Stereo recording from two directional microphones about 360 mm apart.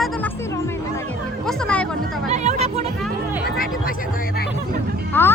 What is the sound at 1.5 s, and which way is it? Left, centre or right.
Speech, centre.